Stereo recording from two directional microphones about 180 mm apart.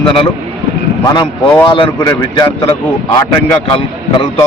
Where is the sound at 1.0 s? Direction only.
20° left (ahead or behind).